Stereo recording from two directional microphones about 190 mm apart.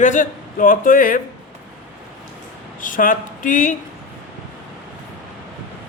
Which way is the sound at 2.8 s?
45° left (ahead or behind).